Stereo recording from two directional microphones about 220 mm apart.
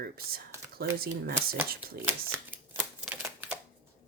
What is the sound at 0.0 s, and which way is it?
Speech, 45° right (ahead or behind).